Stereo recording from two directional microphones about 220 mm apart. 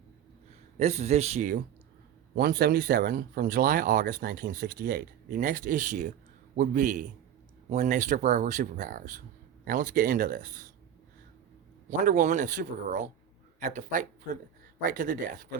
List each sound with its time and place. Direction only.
0.8 s speech: 30° right (ahead or behind)
2.3 s speech: 45° right (ahead or behind)
11.9 s speech: 35° right (ahead or behind)